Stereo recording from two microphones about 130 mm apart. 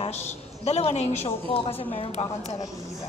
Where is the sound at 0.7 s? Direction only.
55° left (ahead or behind).